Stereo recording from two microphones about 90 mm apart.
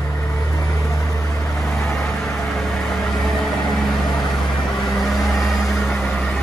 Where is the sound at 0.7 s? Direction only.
30° left (ahead or behind).